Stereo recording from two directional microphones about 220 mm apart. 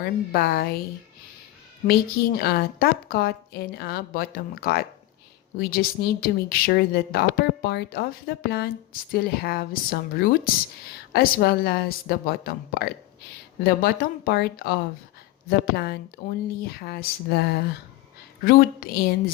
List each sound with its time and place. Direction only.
0.0 s a woman's voice: 45° left (ahead or behind)
1.9 s a woman's voice: 45° left (ahead or behind)